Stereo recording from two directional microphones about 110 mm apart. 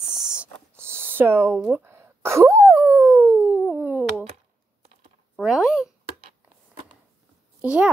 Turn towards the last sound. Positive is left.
turn(degrees=-10)  # may be behind; listen again after turning